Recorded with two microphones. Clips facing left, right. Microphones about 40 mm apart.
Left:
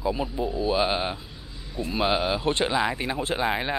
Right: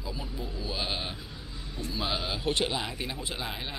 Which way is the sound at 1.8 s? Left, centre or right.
Left.